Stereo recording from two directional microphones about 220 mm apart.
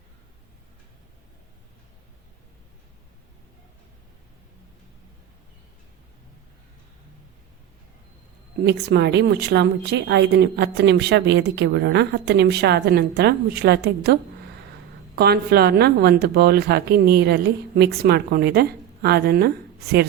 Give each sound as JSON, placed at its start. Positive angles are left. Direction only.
{"t": 8.6, "sound": "a woman's voice", "side_deg": -50}